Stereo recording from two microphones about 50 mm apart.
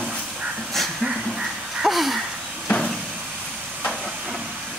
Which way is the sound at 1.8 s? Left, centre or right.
Centre.